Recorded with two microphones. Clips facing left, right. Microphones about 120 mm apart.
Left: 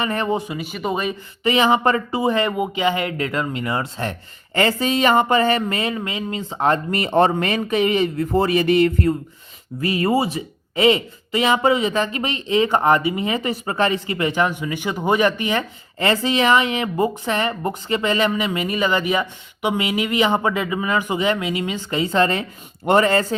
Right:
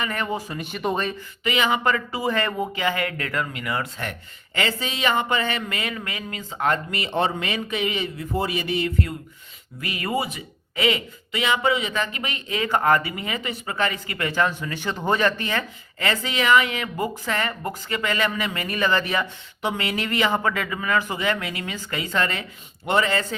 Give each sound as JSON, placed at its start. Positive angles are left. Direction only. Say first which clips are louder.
{"t": 0.0, "sound": "speech", "louder": "left 5 dB", "side_deg": 25}
{"t": 0.5, "sound": "speech", "louder": "left 2 dB", "side_deg": 5}
{"t": 1.5, "sound": "speech", "louder": "left 5 dB", "side_deg": 30}
{"t": 4.5, "sound": "speech", "louder": "left 8 dB", "side_deg": 45}
{"t": 6.9, "sound": "speech", "louder": "left 7 dB", "side_deg": 45}
{"t": 9.8, "sound": "speech", "louder": "left 7 dB", "side_deg": 30}
{"t": 16.0, "sound": "speech", "louder": "left 6 dB", "side_deg": 30}
{"t": 22.9, "sound": "speech", "louder": "left 6 dB", "side_deg": 40}